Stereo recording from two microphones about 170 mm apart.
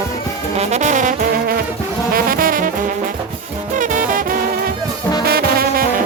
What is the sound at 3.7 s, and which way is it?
Music, 50° right (ahead or behind).